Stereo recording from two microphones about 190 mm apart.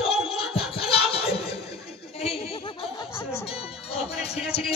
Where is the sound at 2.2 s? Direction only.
30° left (ahead or behind).